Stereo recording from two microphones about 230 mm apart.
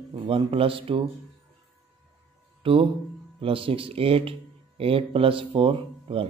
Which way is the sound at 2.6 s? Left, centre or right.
Right.